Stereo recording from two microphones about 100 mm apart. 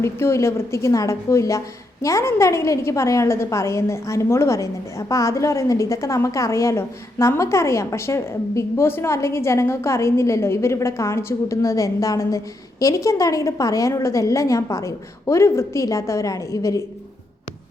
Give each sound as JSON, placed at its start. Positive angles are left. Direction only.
{"t": 0.0, "sound": "a woman's voice", "side_deg": 25}